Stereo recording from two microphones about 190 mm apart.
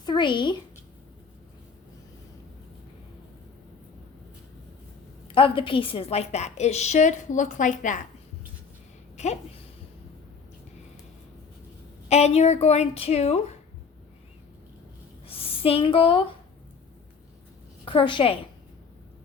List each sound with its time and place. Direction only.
0.0 s speech: 25° left (ahead or behind)
5.3 s a woman's voice: 25° left (ahead or behind)
9.1 s speech: 35° left (ahead or behind)
12.0 s a woman's voice: 35° left (ahead or behind)
15.3 s a sound: 30° left (ahead or behind)
17.8 s a woman's voice: 25° left (ahead or behind)